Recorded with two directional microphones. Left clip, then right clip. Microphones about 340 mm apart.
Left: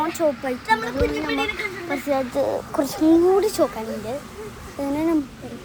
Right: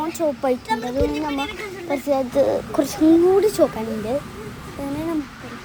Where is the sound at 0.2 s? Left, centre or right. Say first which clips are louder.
Right 1 dB; centre.